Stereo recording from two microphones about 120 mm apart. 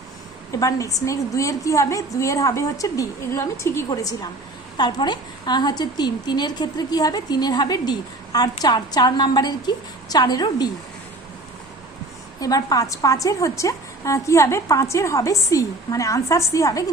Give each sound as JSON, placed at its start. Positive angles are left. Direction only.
{"t": 0.6, "sound": "a woman's voice", "side_deg": 25}
{"t": 12.4, "sound": "a woman's voice", "side_deg": 30}